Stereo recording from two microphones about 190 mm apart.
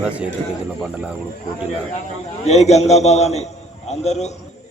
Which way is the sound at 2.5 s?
35° left (ahead or behind).